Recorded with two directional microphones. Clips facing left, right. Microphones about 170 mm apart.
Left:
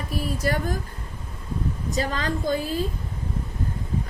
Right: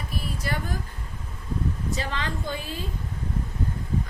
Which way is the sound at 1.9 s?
40° left (ahead or behind).